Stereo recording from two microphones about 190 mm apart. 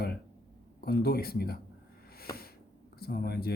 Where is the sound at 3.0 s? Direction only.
55° left (ahead or behind).